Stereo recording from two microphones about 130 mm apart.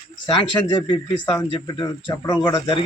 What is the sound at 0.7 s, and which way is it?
Speech, 30° left (ahead or behind).